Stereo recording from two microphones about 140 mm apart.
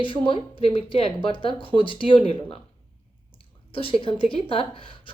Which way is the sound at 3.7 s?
40° left (ahead or behind).